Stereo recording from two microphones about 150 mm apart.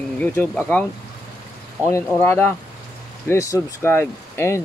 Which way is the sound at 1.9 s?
15° left (ahead or behind).